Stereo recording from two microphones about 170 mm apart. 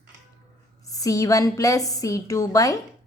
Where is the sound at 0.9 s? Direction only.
20° left (ahead or behind).